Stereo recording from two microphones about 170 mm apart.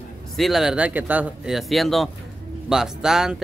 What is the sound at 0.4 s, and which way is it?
Speech, centre (ahead or behind).